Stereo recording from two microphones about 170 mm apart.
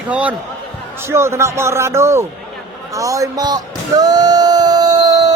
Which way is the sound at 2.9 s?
20° right (ahead or behind).